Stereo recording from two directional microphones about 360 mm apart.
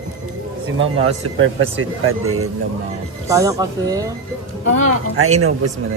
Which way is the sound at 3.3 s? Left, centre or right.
Centre.